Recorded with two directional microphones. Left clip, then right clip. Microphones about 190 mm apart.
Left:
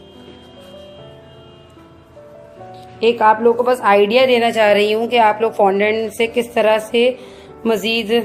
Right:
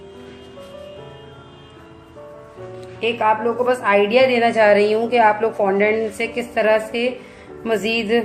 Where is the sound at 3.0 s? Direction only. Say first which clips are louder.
Left 5 dB; 45° left (ahead or behind).